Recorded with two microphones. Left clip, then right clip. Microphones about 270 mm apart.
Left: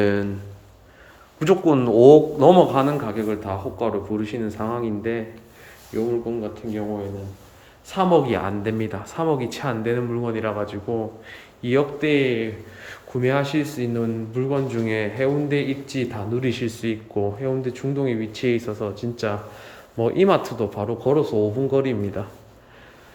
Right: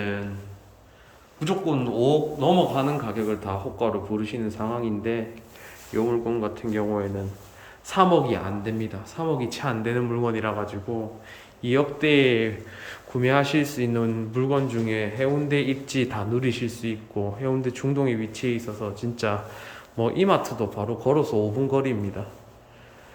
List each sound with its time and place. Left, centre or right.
0.0 s speech: left
1.4 s a man's voice: centre
8.3 s a man's voice: centre